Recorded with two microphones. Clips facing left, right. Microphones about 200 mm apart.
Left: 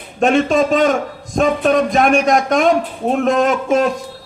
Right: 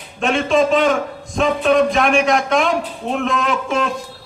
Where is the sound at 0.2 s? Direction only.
40° left (ahead or behind).